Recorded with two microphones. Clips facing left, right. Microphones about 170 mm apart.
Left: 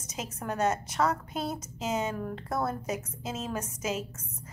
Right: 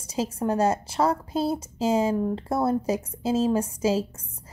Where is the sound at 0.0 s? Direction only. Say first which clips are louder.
Right 10 dB; 30° right (ahead or behind).